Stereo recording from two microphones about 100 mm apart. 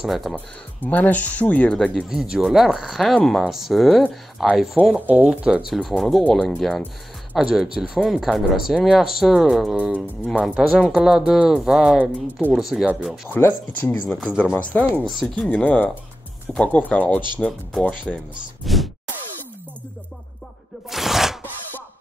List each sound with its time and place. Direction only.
0.0 s speech: centre (ahead or behind)
0.7 s speech: 15° left (ahead or behind)
2.0 s speech: 5° right (ahead or behind)
4.9 s speech: 15° right (ahead or behind)
5.7 s speech: centre (ahead or behind)
12.0 s speech: 15° right (ahead or behind)
12.5 s speech: 5° right (ahead or behind)
13.3 s speech: 20° left (ahead or behind)
14.0 s speech: centre (ahead or behind)
14.3 s speech: 10° left (ahead or behind)
15.0 s speech: centre (ahead or behind)
15.4 s speech: 10° left (ahead or behind)
18.6 s a sound: centre (ahead or behind)
20.9 s a sound: 5° right (ahead or behind)